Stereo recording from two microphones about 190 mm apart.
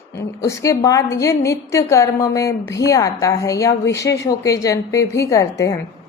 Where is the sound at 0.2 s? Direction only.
15° left (ahead or behind).